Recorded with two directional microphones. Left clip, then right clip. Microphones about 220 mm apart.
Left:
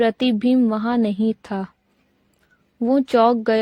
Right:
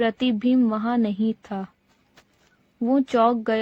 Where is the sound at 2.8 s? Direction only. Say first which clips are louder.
Left 3 dB; 45° left (ahead or behind).